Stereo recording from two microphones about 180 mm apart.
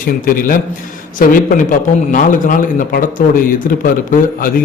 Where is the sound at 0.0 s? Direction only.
50° left (ahead or behind).